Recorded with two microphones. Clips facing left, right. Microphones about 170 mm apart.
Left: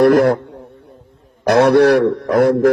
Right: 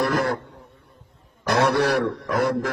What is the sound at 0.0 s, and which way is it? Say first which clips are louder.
A man's voice: left 12 dB; 65° left (ahead or behind).